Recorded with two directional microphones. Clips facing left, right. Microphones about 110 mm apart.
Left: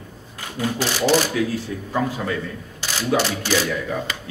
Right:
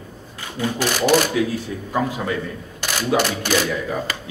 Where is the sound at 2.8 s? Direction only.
55° right (ahead or behind).